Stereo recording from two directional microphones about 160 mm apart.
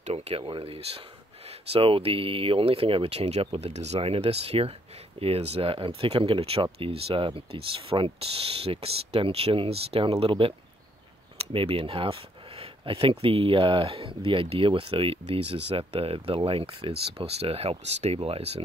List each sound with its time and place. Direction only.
0.0 s speech: 40° right (ahead or behind)
11.5 s speech: 35° right (ahead or behind)